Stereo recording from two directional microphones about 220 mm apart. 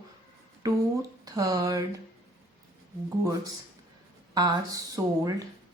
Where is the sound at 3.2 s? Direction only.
15° right (ahead or behind).